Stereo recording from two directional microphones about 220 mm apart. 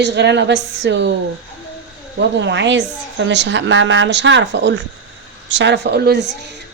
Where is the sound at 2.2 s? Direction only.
55° right (ahead or behind).